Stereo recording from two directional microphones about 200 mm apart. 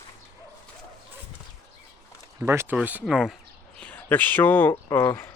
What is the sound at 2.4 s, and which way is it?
Speech, 10° right (ahead or behind).